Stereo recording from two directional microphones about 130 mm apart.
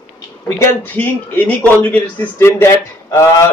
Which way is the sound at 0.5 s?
15° left (ahead or behind).